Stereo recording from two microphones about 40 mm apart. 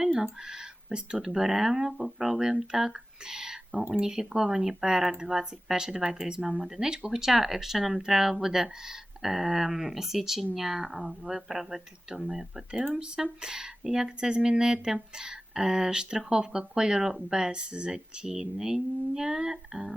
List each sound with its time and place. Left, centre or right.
0.1 s speech: centre
17.3 s speech: right